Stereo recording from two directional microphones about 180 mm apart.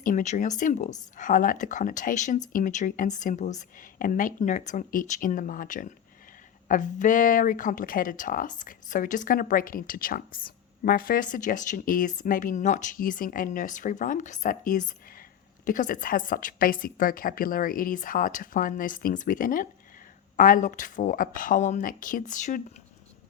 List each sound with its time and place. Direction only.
0.0 s speech: 45° left (ahead or behind)